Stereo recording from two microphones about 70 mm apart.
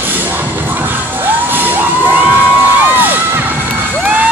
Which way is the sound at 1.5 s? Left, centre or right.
Right.